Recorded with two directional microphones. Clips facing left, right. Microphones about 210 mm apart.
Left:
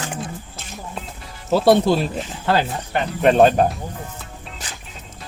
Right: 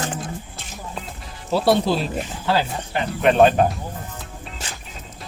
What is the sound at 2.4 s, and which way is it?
Speech, 55° left (ahead or behind).